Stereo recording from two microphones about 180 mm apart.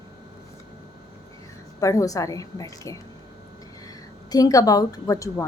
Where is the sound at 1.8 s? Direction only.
15° left (ahead or behind).